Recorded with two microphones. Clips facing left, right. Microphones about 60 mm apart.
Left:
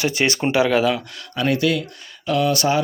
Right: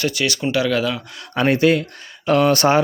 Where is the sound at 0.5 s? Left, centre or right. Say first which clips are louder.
Left 3 dB; centre.